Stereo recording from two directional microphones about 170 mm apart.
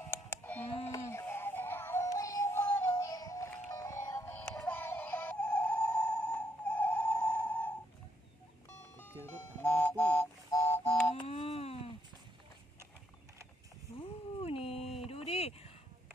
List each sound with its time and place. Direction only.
0.1 s a sound: 10° left (ahead or behind)
0.8 s synthetic singing: 15° left (ahead or behind)
4.6 s music: 10° left (ahead or behind)
8.9 s music: 10° left (ahead or behind)
11.1 s wail: 30° left (ahead or behind)
14.4 s dog: 35° left (ahead or behind)
15.0 s a sound: 35° left (ahead or behind)